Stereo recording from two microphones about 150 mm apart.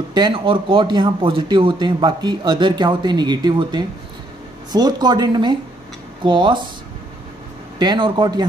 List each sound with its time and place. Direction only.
0.1 s speech: 30° right (ahead or behind)
7.8 s speech: 30° right (ahead or behind)